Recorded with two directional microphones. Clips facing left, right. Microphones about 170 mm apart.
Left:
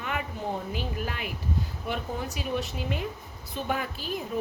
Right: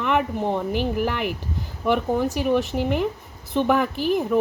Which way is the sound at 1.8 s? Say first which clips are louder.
Right 14 dB; 70° right (ahead or behind).